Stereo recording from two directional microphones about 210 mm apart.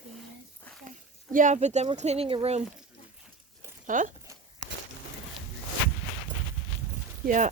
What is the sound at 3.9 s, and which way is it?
Speech, 40° right (ahead or behind).